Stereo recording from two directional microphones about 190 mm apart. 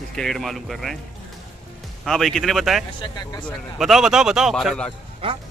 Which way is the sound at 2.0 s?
Centre (ahead or behind).